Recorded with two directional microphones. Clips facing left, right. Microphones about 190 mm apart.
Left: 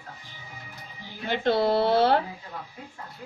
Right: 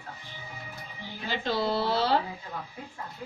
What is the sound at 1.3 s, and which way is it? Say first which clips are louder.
Speech: left 6 dB; 60° left (ahead or behind).